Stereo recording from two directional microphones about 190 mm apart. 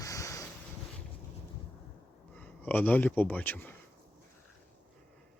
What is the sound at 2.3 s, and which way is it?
Speech, 10° left (ahead or behind).